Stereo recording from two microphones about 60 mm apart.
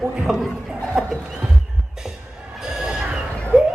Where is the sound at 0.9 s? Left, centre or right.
Centre.